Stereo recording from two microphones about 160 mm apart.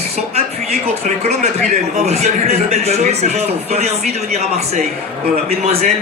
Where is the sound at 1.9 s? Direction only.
45° right (ahead or behind).